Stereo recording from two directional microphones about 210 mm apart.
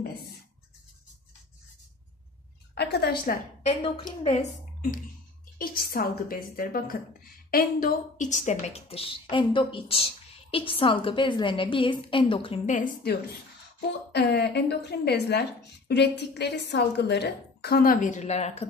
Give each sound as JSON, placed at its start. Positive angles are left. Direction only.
{"t": 2.7, "sound": "a woman's voice", "side_deg": 50}
{"t": 3.6, "sound": "a woman's voice", "side_deg": 25}
{"t": 5.6, "sound": "a woman's voice", "side_deg": 45}